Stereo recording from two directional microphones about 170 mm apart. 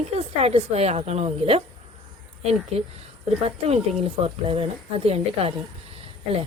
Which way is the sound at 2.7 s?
40° right (ahead or behind).